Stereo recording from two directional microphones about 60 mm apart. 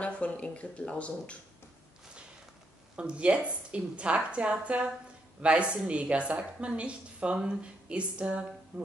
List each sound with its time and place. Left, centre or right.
0.0 s speech: left
3.0 s a woman's voice: centre